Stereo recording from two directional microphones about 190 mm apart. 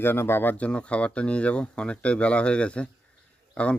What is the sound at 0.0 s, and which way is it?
Speech, 10° left (ahead or behind).